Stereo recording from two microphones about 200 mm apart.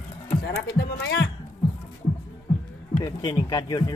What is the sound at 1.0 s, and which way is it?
Music, 55° left (ahead or behind).